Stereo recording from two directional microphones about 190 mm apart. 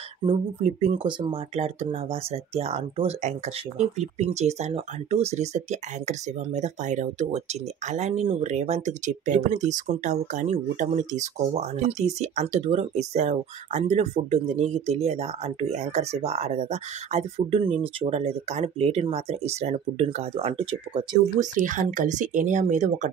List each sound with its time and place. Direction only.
0.2 s speech: 20° right (ahead or behind)
0.6 s speech: 35° right (ahead or behind)
21.5 s speech: 45° right (ahead or behind)